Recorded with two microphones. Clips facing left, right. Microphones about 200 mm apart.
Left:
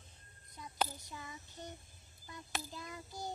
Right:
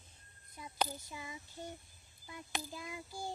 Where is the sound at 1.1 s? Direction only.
10° right (ahead or behind).